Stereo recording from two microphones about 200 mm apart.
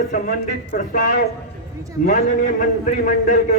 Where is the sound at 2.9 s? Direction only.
40° left (ahead or behind).